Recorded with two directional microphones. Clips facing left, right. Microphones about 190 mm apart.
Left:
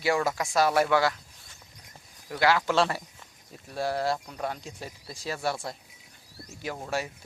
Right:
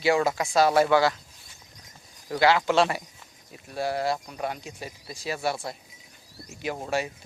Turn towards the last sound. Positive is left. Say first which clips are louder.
# right 3 dB
turn(degrees=-20)  # may be behind; listen again after turning